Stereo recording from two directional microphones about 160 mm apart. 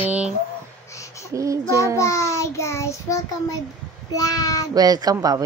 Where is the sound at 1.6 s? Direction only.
20° left (ahead or behind).